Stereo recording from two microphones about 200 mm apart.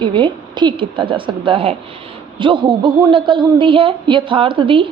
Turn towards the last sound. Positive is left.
turn(degrees=-25)  # may be behind; listen again after turning